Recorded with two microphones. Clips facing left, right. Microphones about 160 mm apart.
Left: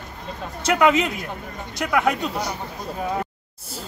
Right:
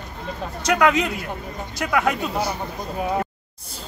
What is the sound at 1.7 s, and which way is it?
Speech, centre (ahead or behind).